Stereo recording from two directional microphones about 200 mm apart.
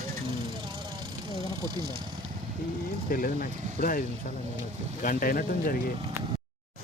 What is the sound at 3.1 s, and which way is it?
Speech, 45° left (ahead or behind).